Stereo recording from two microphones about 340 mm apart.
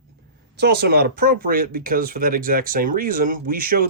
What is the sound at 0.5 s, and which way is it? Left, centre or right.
Speech, right.